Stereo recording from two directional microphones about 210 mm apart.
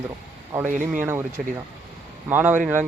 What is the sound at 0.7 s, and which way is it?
Speech, 40° right (ahead or behind).